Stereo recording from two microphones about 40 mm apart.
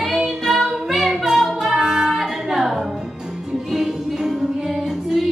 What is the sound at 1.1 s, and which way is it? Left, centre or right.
Singing, centre.